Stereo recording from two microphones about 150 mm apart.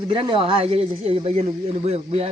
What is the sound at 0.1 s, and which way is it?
Speech, 35° right (ahead or behind).